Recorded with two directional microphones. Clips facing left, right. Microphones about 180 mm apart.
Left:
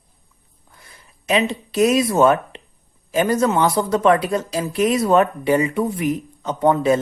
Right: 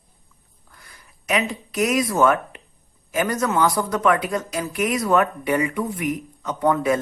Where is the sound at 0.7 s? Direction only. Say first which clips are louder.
Left 1 dB; 25° left (ahead or behind).